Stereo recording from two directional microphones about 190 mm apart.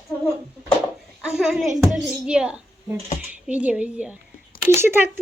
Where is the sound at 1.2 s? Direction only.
5° right (ahead or behind).